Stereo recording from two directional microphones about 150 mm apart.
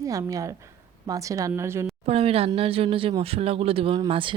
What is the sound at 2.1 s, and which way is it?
Speech, 40° right (ahead or behind).